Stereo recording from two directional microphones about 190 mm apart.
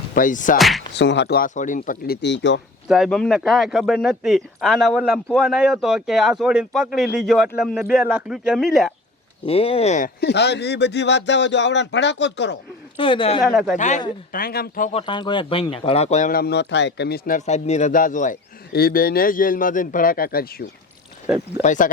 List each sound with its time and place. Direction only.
0.1 s a man's voice: 45° left (ahead or behind)
0.9 s a man's voice: 65° left (ahead or behind); by 2.1 s 45° left (ahead or behind)
2.2 s speech: 70° left (ahead or behind)
2.9 s speech: centre (ahead or behind)
9.5 s speech: 30° left (ahead or behind)
10.2 s speech: 60° left (ahead or behind)
13.0 s speech: 25° left (ahead or behind)
13.4 s speech: 5° right (ahead or behind)
13.7 s speech: 40° left (ahead or behind)
14.3 s a man's voice: 50° left (ahead or behind)
14.9 s speech: 25° left (ahead or behind)
16.3 s a man's voice: 60° left (ahead or behind)
21.6 s speech: 40° left (ahead or behind)